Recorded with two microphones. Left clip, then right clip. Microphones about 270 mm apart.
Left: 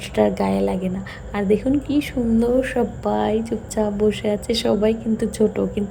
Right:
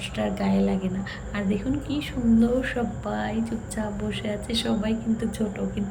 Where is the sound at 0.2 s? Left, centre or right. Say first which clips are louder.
Left 8 dB; left.